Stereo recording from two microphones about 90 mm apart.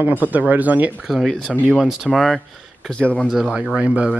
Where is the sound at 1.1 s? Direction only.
Centre (ahead or behind).